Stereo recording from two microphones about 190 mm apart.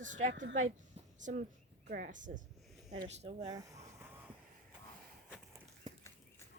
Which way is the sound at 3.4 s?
20° right (ahead or behind).